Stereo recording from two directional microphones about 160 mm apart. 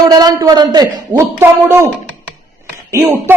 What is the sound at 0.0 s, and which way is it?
A man's voice, 25° right (ahead or behind).